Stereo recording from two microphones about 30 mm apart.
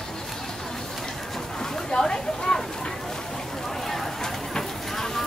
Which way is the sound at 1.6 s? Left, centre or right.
Left.